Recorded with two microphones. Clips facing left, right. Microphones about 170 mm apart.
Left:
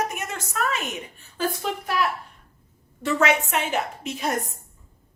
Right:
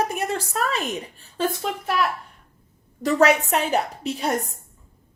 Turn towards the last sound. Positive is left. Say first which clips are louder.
# right 2 dB
turn(degrees=-35)  # may be behind; listen again after turning